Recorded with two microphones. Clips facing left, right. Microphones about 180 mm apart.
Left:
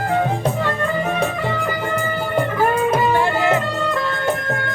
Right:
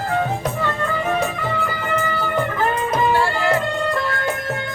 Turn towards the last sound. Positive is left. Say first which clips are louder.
# left 2 dB
turn(degrees=20)  # may be behind; listen again after turning